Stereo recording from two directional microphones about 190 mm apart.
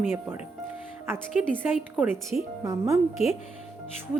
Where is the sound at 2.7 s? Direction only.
15° right (ahead or behind).